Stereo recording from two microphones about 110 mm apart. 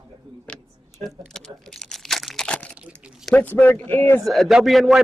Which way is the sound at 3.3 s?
15° left (ahead or behind).